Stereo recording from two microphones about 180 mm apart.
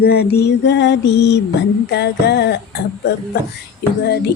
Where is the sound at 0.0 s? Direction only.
65° left (ahead or behind).